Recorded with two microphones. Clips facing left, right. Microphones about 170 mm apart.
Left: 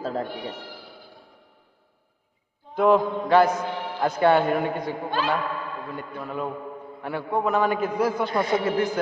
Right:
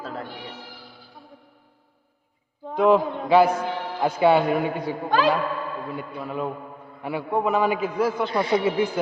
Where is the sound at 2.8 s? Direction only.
5° right (ahead or behind).